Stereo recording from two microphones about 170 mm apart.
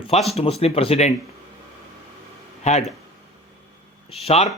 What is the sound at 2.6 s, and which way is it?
Speech, 40° left (ahead or behind).